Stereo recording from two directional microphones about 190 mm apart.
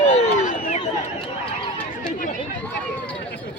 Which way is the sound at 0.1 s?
35° left (ahead or behind).